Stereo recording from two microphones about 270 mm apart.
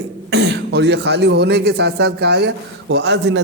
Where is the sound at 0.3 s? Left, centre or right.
Right.